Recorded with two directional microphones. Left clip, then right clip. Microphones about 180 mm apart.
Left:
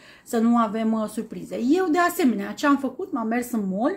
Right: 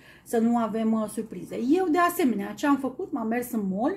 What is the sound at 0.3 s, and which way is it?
Speech, 15° left (ahead or behind).